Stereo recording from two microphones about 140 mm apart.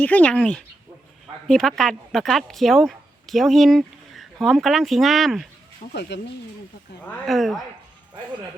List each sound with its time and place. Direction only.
0.0 s speech: 10° left (ahead or behind)
5.8 s speech: 75° left (ahead or behind)
7.3 s speech: centre (ahead or behind)